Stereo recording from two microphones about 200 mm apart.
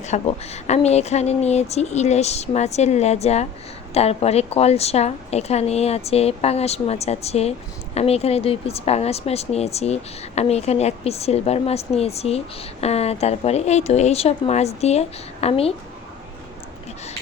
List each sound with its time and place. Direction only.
0.0 s speech: 35° left (ahead or behind)